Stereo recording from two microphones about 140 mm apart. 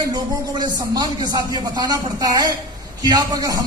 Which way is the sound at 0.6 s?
30° right (ahead or behind).